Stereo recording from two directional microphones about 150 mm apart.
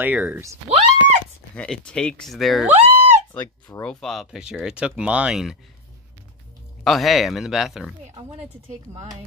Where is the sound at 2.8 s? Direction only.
45° right (ahead or behind).